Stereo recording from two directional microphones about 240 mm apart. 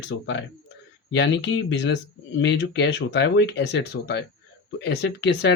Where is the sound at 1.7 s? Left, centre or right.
Left.